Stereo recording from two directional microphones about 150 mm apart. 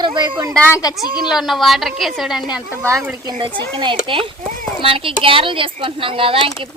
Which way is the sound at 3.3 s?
30° right (ahead or behind).